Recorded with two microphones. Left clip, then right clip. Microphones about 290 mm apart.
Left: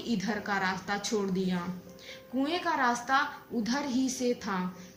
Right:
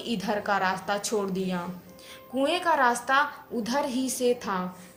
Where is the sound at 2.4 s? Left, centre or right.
Centre.